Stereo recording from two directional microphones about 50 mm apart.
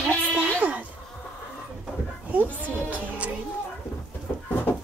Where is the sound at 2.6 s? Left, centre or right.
Right.